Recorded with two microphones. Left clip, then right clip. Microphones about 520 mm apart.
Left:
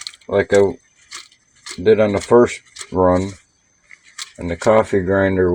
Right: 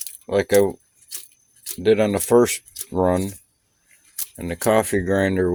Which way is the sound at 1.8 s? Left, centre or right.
Right.